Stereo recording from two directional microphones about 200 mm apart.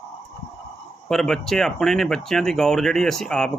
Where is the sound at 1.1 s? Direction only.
Centre (ahead or behind).